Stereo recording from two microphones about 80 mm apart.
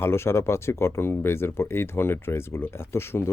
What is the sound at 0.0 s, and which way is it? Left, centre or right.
Speech, left.